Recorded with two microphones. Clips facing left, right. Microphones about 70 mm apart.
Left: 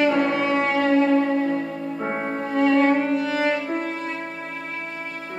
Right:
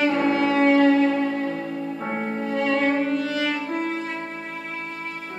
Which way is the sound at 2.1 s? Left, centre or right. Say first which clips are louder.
Left 1 dB; left.